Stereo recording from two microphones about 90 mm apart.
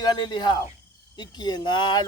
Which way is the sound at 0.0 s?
55° left (ahead or behind).